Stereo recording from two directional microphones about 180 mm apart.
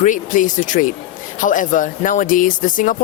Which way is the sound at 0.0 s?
45° left (ahead or behind).